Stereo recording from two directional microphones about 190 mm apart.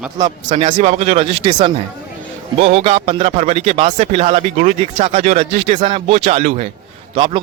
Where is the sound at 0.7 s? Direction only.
35° right (ahead or behind).